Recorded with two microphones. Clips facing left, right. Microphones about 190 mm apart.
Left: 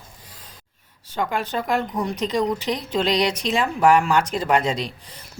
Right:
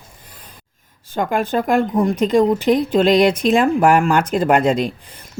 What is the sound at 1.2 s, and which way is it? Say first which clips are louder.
Speech: right 6 dB; 50° right (ahead or behind).